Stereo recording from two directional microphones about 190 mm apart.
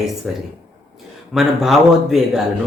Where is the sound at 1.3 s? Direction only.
Centre (ahead or behind).